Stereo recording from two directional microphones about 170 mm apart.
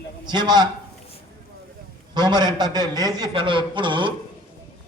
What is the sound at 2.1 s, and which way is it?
A man's voice, 25° right (ahead or behind).